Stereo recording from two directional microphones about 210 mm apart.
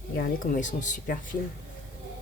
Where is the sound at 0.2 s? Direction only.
40° left (ahead or behind).